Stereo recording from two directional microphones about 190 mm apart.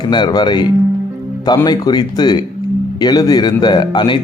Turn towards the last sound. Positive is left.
turn(degrees=25)  # may be behind; listen again after turning